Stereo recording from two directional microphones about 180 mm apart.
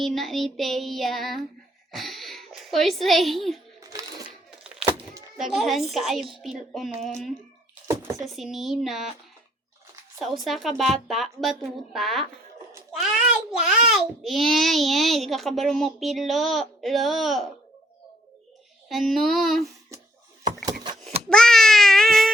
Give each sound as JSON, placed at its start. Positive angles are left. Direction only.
{"t": 0.0, "sound": "a child's voice", "side_deg": 0}
{"t": 3.8, "sound": "a sound", "side_deg": -15}
{"t": 4.6, "sound": "a sound", "side_deg": -5}
{"t": 5.4, "sound": "a child's voice", "side_deg": 0}
{"t": 8.2, "sound": "a child's voice", "side_deg": 0}
{"t": 10.2, "sound": "a child's voice", "side_deg": 0}
{"t": 18.9, "sound": "a child's voice", "side_deg": 0}
{"t": 21.2, "sound": "baby cry", "side_deg": 5}